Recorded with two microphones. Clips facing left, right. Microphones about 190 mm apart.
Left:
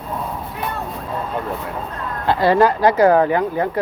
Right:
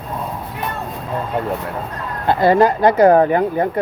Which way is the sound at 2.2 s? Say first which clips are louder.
Right 2 dB; 45° right (ahead or behind).